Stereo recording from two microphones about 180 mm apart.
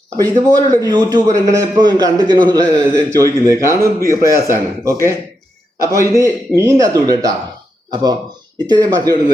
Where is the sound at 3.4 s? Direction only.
15° right (ahead or behind).